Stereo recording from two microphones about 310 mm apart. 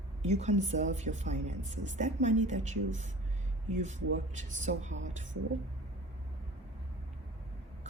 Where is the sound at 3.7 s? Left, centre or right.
Right.